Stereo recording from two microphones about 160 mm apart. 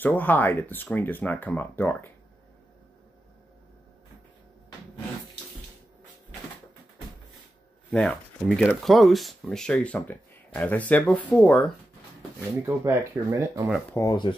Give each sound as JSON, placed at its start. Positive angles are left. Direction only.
{"t": 0.0, "sound": "speech", "side_deg": 10}
{"t": 7.9, "sound": "speech", "side_deg": 5}
{"t": 12.6, "sound": "speech", "side_deg": -15}
{"t": 13.7, "sound": "speech", "side_deg": 0}
{"t": 13.9, "sound": "speech", "side_deg": 25}